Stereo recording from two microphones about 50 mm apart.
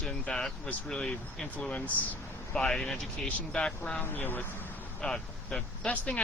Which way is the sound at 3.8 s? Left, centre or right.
Left.